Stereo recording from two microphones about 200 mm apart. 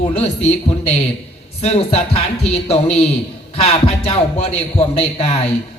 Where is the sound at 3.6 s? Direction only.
30° left (ahead or behind).